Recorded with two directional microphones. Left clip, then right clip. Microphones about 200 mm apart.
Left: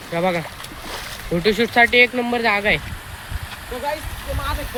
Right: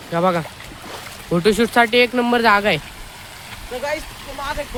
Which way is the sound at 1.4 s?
25° right (ahead or behind).